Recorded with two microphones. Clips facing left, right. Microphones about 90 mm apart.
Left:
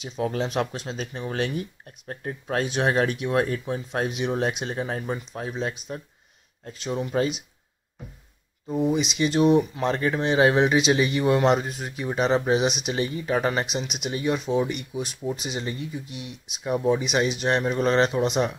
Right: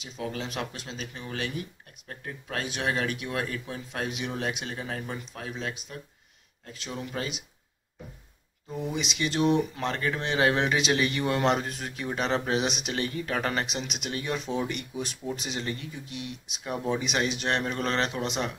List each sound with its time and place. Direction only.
0.0 s speech: 40° left (ahead or behind)
8.6 s speech: 25° left (ahead or behind)